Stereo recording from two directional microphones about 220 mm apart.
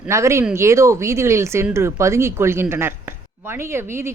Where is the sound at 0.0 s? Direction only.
15° right (ahead or behind).